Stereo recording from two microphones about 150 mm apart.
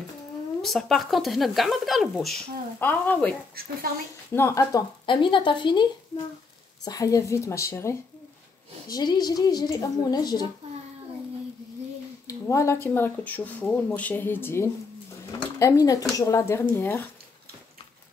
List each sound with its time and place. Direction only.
0.6 s speech: centre (ahead or behind)
2.8 s speech: 10° left (ahead or behind)
4.4 s speech: 20° left (ahead or behind)
5.0 s speech: 35° left (ahead or behind)
12.3 s speech: 20° left (ahead or behind)